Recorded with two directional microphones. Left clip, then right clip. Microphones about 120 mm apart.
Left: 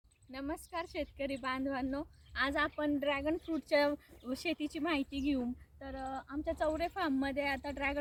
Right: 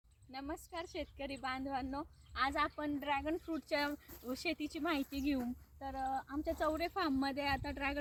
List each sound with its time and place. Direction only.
0.3 s a woman's voice: 25° left (ahead or behind)